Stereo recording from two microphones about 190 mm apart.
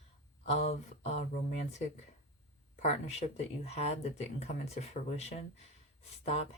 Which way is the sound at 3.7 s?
35° left (ahead or behind).